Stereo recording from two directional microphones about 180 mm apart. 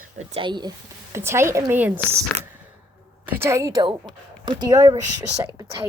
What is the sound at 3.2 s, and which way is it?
A woman's voice, 10° right (ahead or behind).